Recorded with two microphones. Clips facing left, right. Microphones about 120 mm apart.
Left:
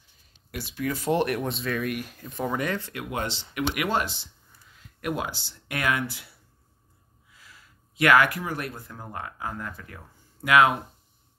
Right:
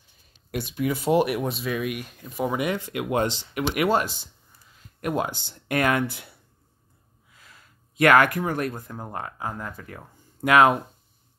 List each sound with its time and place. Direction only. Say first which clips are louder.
0.6 s speech: right 4 dB; 15° right (ahead or behind)
3.1 s speech: right 7 dB; 45° right (ahead or behind)
8.0 s speech: right 3 dB; 45° right (ahead or behind)
8.9 s speech: right 3 dB; 35° right (ahead or behind)